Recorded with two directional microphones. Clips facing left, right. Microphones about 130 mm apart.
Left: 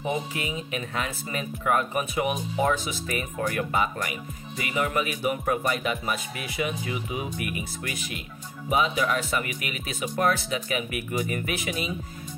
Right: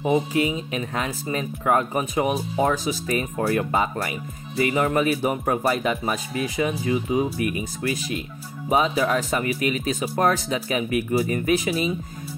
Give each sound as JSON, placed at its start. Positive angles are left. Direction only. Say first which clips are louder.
{"t": 0.0, "sound": "speech", "louder": "right 8 dB", "side_deg": -25}